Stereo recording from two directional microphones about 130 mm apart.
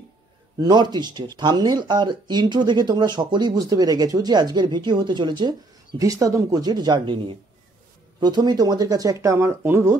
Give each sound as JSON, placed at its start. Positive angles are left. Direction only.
{"t": 0.6, "sound": "speech", "side_deg": -35}